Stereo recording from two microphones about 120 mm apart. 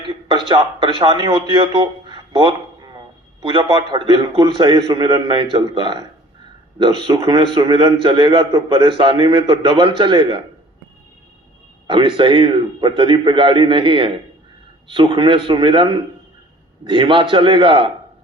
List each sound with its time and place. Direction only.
0.0 s a man's voice: 40° right (ahead or behind)
7.2 s a man's voice: 40° right (ahead or behind)
11.9 s a man's voice: 40° right (ahead or behind)